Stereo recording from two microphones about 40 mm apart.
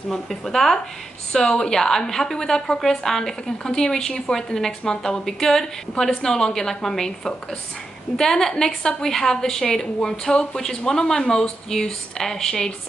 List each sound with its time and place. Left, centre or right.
0.1 s a woman's voice: centre